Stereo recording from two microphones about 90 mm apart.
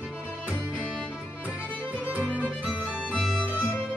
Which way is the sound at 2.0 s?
15° right (ahead or behind).